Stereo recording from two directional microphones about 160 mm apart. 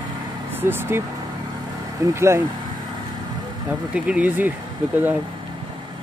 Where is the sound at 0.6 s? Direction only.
15° right (ahead or behind).